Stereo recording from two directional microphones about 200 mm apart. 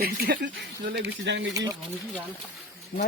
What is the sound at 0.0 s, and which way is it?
Speech, 50° right (ahead or behind).